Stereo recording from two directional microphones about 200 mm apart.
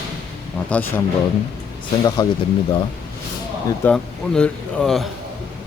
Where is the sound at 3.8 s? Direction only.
5° left (ahead or behind).